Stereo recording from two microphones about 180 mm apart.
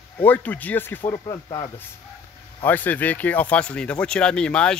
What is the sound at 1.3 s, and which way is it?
Speech, 25° left (ahead or behind).